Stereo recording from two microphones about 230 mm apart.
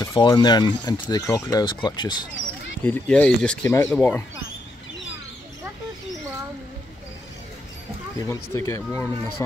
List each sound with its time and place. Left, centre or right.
0.0 s speech: centre
2.8 s speech: centre
8.2 s speech: centre